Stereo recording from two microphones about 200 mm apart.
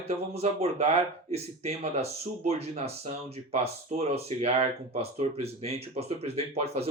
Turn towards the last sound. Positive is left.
turn(degrees=-30)  # may be behind; listen again after turning